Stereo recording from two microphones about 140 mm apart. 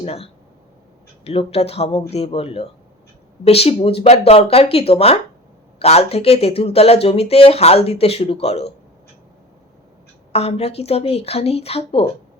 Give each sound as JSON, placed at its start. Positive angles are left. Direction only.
{"t": 0.0, "sound": "speech", "side_deg": 45}
{"t": 10.3, "sound": "speech", "side_deg": 45}